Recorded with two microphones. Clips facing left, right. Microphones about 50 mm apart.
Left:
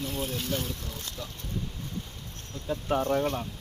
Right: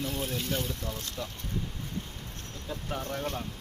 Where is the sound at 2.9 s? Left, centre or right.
Left.